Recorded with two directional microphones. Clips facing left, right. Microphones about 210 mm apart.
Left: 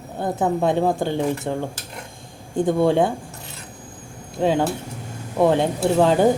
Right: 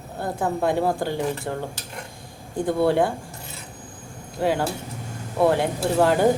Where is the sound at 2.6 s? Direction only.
20° left (ahead or behind).